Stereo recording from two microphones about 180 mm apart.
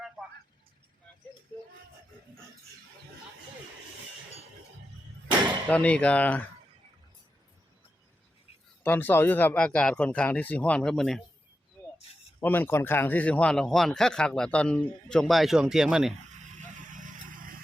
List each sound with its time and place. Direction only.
5.6 s speech: 10° left (ahead or behind)
8.8 s speech: 10° left (ahead or behind)
12.4 s a man's voice: 10° left (ahead or behind)
16.6 s vehicle: 45° right (ahead or behind)